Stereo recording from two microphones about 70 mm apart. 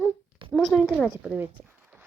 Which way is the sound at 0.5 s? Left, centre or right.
Centre.